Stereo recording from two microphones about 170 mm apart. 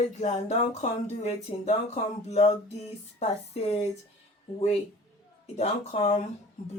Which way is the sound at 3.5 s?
40° left (ahead or behind).